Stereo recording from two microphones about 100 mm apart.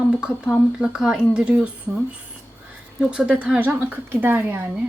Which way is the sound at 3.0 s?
10° right (ahead or behind).